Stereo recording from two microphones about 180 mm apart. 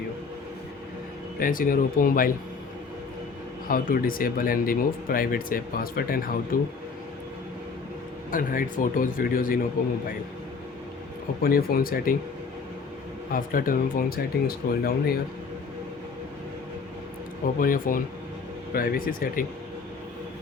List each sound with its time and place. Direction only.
1.4 s speech: 50° left (ahead or behind)
3.7 s speech: 50° left (ahead or behind)
8.3 s speech: 50° left (ahead or behind)
11.4 s speech: 55° left (ahead or behind)
13.3 s speech: 50° left (ahead or behind)
17.6 s speech: 50° left (ahead or behind)